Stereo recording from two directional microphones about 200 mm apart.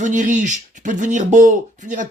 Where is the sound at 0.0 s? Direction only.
40° right (ahead or behind).